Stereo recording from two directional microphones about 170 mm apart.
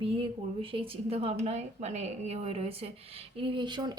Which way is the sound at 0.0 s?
35° right (ahead or behind).